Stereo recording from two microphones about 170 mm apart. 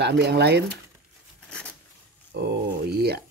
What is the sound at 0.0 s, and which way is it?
Speech, 85° right.